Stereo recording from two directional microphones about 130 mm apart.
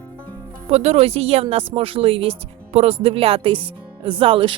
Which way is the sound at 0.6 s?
50° right (ahead or behind).